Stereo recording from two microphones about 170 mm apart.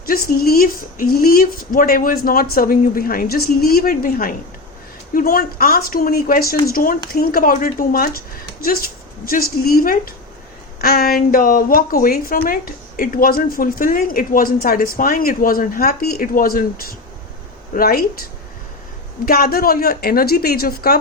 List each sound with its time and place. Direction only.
0.0 s speech: 60° left (ahead or behind)
9.2 s speech: 60° left (ahead or behind)
17.7 s speech: 60° left (ahead or behind)
19.2 s speech: 60° left (ahead or behind)